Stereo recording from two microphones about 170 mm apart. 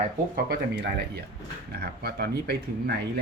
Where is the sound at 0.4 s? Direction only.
70° right (ahead or behind).